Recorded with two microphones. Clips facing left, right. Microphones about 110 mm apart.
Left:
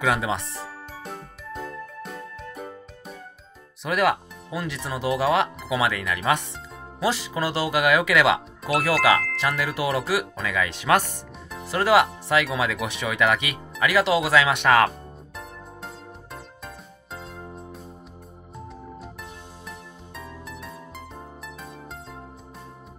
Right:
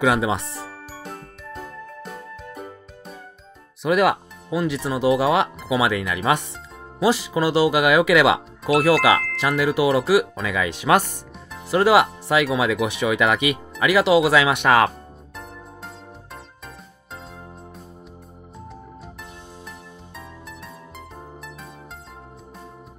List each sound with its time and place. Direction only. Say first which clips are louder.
0.0 s speech: right 4 dB; 15° right (ahead or behind)
1.0 s music: even; centre (ahead or behind)
3.8 s speech: right 4 dB; 15° right (ahead or behind)
6.0 s speech: right 2 dB; 5° right (ahead or behind)
10.6 s speech: right 3 dB; 15° right (ahead or behind)
14.9 s music: even; centre (ahead or behind)
20.2 s music: left 2 dB; centre (ahead or behind)